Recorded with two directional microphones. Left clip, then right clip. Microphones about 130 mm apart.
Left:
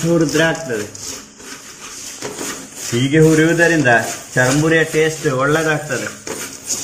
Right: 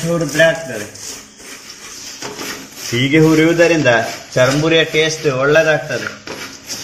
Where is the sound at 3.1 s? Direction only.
35° right (ahead or behind).